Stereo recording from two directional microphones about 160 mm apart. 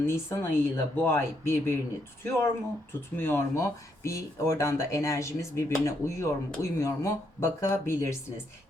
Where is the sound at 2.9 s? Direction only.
15° left (ahead or behind).